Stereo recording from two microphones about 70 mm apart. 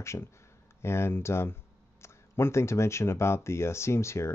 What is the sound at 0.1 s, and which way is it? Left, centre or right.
Speech, left.